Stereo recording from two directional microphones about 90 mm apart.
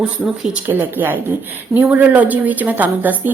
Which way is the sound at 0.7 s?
25° right (ahead or behind).